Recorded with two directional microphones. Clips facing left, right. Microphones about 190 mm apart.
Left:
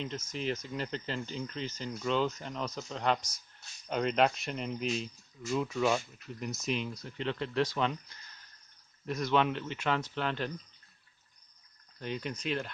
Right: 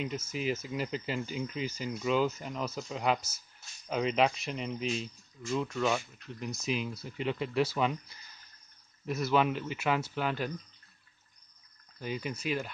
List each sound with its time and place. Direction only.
0.0 s speech: 10° right (ahead or behind)
12.0 s speech: 5° right (ahead or behind)